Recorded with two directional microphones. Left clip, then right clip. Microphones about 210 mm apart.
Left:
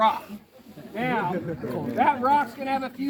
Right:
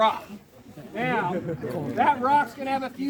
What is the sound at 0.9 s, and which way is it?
Speech, 5° left (ahead or behind).